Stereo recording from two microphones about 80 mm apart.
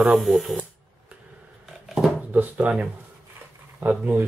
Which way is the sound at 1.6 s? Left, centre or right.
Centre.